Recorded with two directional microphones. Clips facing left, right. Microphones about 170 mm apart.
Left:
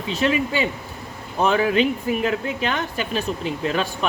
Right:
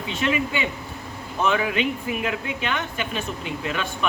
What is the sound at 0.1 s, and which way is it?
Speech, 35° left (ahead or behind).